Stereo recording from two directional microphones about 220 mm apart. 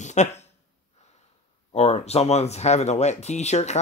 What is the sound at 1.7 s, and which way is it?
Speech, 30° left (ahead or behind).